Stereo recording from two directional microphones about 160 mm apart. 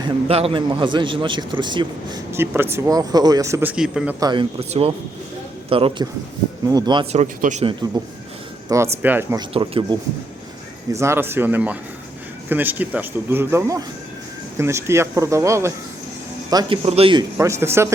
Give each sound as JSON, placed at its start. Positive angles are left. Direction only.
{"t": 0.0, "sound": "a man's voice", "side_deg": -35}
{"t": 2.3, "sound": "speech", "side_deg": -15}
{"t": 4.2, "sound": "speech", "side_deg": -25}
{"t": 4.7, "sound": "a man's voice", "side_deg": -35}
{"t": 6.7, "sound": "a man's voice", "side_deg": -25}
{"t": 7.6, "sound": "a man's voice", "side_deg": -35}
{"t": 8.7, "sound": "speech", "side_deg": -15}
{"t": 9.5, "sound": "a man's voice", "side_deg": -35}
{"t": 10.9, "sound": "a man's voice", "side_deg": -15}
{"t": 16.8, "sound": "a man's voice", "side_deg": -40}
{"t": 17.3, "sound": "speech", "side_deg": -15}